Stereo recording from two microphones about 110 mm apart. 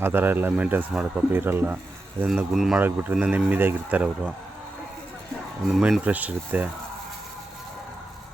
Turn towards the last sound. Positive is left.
turn(degrees=-15)  # may be behind; listen again after turning